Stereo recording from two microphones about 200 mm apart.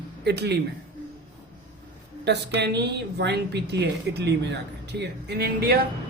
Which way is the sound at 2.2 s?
55° right (ahead or behind).